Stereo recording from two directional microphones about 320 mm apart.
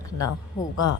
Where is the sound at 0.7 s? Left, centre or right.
Left.